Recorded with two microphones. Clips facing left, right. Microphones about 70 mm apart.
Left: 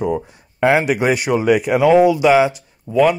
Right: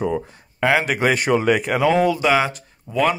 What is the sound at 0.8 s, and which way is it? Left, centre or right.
Speech, centre.